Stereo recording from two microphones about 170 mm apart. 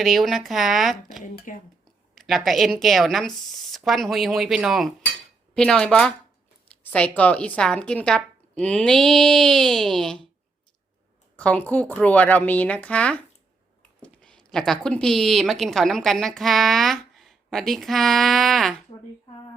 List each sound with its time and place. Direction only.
0.0 s a woman's voice: centre (ahead or behind)
1.5 s speech: 50° left (ahead or behind)
2.1 s a woman's voice: centre (ahead or behind)
6.7 s a sound: 10° left (ahead or behind)
7.2 s a woman's voice: 10° left (ahead or behind)
11.3 s speech: 5° left (ahead or behind)